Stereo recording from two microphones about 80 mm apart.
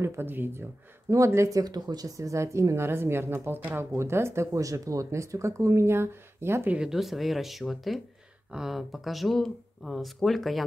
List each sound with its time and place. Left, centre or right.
0.0 s speech: right
1.1 s speech: right
1.6 s speech: right
6.7 s speech: centre